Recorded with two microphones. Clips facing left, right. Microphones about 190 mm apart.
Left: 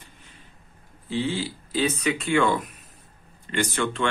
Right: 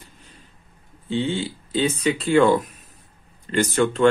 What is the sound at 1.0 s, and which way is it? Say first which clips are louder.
Speech: right 3 dB; 25° right (ahead or behind).